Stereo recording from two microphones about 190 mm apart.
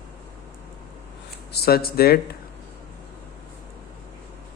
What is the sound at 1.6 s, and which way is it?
Speech, 55° left (ahead or behind).